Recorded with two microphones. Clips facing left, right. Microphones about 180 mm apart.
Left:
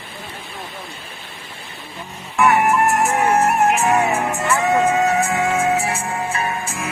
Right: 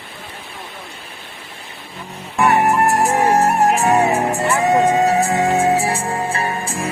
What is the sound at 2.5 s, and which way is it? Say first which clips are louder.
Music: right 2 dB; 35° right (ahead or behind).